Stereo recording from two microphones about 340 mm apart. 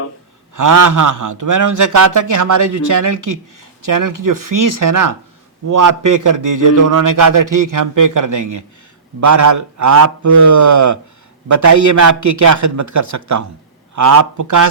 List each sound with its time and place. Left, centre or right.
0.5 s a man's voice: right